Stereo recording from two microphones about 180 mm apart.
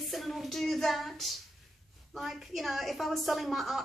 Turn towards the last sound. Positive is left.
turn(degrees=0)  # may be behind; listen again after turning